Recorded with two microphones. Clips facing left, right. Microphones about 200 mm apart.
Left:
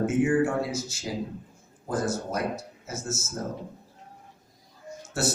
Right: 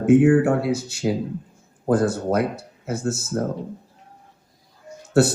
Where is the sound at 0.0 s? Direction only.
65° right (ahead or behind).